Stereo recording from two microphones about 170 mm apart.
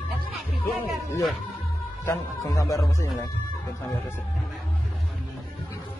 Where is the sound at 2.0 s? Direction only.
15° left (ahead or behind).